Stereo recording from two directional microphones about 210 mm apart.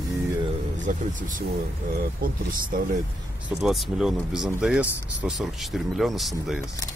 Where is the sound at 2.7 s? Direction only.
45° right (ahead or behind).